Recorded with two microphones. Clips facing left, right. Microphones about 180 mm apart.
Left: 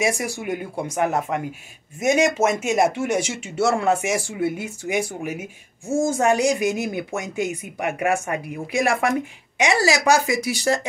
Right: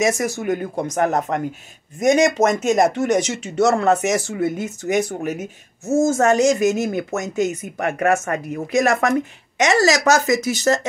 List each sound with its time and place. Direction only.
0.0 s speech: 10° left (ahead or behind)
2.0 s speech: 10° left (ahead or behind)